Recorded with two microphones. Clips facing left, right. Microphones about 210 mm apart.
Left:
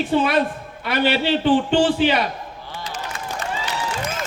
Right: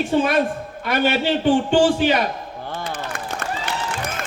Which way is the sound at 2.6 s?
55° right (ahead or behind).